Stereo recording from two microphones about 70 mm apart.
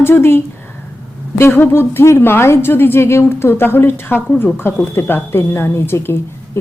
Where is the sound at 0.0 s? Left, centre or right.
Left.